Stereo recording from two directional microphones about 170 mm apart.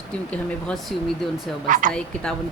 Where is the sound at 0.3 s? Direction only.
5° left (ahead or behind).